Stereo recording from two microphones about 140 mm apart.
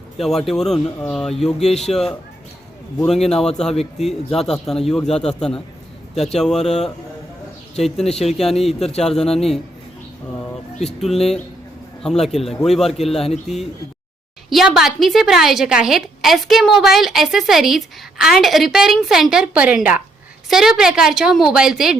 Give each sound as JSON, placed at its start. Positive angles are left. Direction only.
{"t": 0.2, "sound": "a woman's voice", "side_deg": 0}
{"t": 3.1, "sound": "a woman's voice", "side_deg": 5}
{"t": 8.8, "sound": "speech", "side_deg": 45}
{"t": 9.0, "sound": "a woman's voice", "side_deg": 5}
{"t": 10.3, "sound": "a sound", "side_deg": 5}
{"t": 12.0, "sound": "a woman's voice", "side_deg": 5}
{"t": 13.5, "sound": "speech", "side_deg": 55}
{"t": 14.5, "sound": "a woman's voice", "side_deg": -5}